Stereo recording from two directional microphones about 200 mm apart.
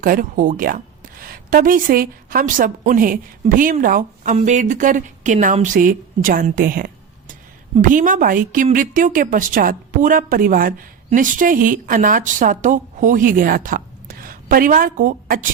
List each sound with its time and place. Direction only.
0.0 s a woman's voice: 45° right (ahead or behind)